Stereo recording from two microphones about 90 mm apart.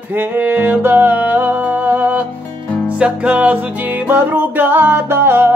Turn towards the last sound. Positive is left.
turn(degrees=-25)  # may be behind; listen again after turning